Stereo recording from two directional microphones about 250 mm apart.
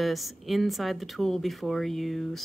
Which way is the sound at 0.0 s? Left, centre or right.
Centre.